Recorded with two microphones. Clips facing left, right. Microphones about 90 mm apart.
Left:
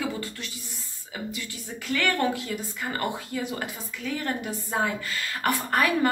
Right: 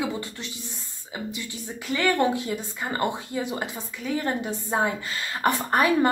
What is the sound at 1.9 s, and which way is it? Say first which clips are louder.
Speech: right 3 dB; 20° right (ahead or behind).